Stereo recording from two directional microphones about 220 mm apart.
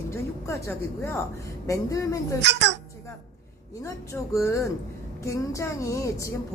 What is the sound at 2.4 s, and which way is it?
Speech, 50° right (ahead or behind).